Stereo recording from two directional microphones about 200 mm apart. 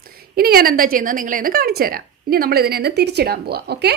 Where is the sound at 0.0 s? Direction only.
50° right (ahead or behind).